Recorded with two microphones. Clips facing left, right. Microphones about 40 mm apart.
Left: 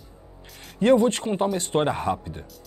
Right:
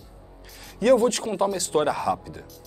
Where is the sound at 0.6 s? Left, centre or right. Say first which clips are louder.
Even; left.